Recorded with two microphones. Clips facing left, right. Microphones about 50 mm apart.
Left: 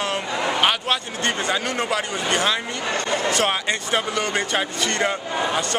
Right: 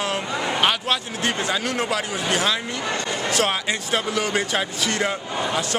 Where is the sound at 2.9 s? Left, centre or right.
Left.